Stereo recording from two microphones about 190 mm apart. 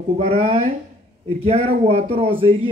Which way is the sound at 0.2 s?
30° right (ahead or behind).